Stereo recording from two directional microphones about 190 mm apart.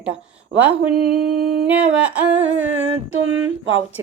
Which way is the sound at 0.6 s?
5° right (ahead or behind).